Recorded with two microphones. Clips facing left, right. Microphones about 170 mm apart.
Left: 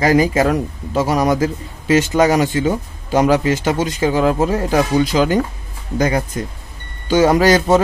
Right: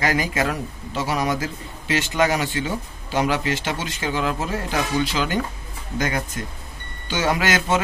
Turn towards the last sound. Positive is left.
turn(degrees=35)  # may be behind; listen again after turning